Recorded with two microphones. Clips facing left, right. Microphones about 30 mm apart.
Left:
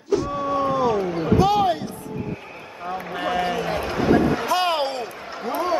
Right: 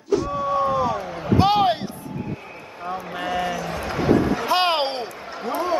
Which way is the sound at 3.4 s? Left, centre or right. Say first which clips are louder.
Left 3 dB; left.